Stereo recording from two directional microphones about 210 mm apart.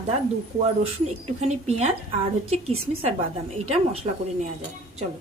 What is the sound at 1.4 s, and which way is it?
A woman's voice, 30° right (ahead or behind).